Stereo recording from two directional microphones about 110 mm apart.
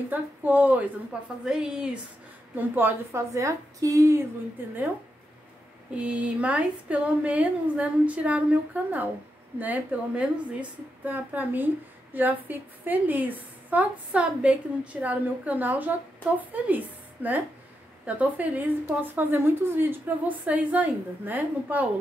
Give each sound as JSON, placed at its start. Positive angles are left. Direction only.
{"t": 0.1, "sound": "a woman's voice", "side_deg": -15}
{"t": 2.5, "sound": "a woman's voice", "side_deg": -15}
{"t": 5.9, "sound": "a woman's voice", "side_deg": -10}